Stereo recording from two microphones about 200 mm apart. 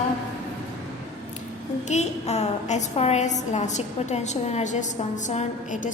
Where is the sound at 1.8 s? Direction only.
35° left (ahead or behind).